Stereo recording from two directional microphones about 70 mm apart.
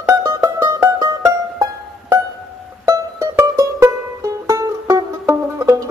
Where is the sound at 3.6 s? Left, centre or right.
Right.